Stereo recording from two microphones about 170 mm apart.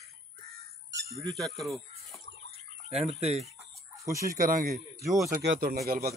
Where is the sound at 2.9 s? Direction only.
40° right (ahead or behind).